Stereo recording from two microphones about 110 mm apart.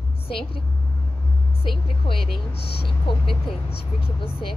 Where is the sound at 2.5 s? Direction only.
60° left (ahead or behind).